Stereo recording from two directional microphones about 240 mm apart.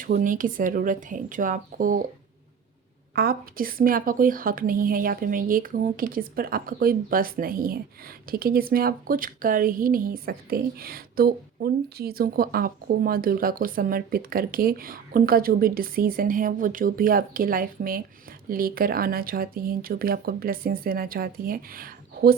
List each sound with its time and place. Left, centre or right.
0.0 s a woman's voice: right
3.2 s a woman's voice: right